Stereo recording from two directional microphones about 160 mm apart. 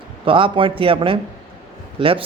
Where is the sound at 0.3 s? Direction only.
30° right (ahead or behind).